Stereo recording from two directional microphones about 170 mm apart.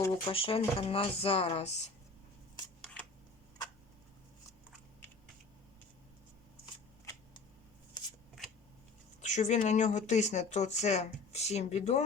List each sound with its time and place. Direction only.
0.3 s speech: 35° left (ahead or behind)
9.2 s speech: 45° left (ahead or behind)